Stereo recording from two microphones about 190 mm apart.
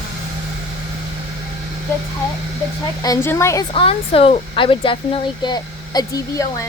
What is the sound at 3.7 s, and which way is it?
Speech, 30° left (ahead or behind).